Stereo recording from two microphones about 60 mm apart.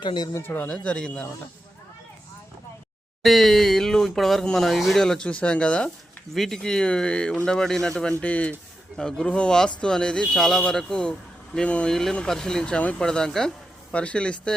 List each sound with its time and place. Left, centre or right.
0.4 s speech: left
0.7 s speech: centre
3.2 s speech: centre
5.3 s speech: centre
6.3 s speech: centre
8.2 s speech: left
9.0 s speech: centre
11.5 s speech: centre
11.9 s speech: centre
13.9 s speech: centre